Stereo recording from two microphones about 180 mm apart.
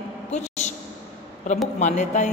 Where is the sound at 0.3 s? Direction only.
40° left (ahead or behind).